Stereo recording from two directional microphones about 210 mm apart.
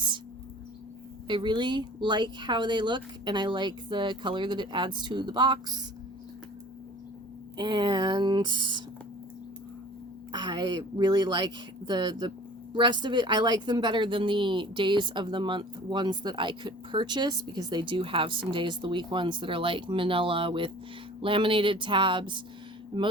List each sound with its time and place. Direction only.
1.3 s a woman's voice: 20° right (ahead or behind)
7.5 s a woman's voice: 20° right (ahead or behind)
10.3 s a woman's voice: 20° right (ahead or behind)